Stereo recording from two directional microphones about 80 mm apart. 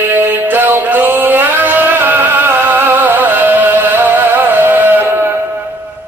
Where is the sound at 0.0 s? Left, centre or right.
Right.